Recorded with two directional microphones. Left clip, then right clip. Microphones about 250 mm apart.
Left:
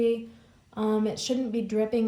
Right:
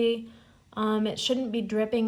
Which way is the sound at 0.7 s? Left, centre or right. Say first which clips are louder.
Even; right.